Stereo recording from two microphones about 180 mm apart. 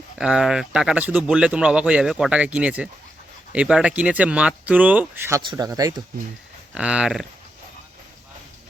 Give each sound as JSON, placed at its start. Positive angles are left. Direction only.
{"t": 0.2, "sound": "speech", "side_deg": -5}
{"t": 6.7, "sound": "speech", "side_deg": -5}